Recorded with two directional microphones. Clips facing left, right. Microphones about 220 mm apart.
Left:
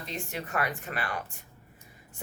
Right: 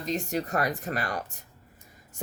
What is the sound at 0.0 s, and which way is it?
Speech, 40° right (ahead or behind).